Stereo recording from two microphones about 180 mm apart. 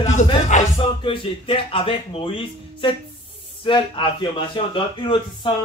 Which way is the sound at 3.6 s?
25° left (ahead or behind).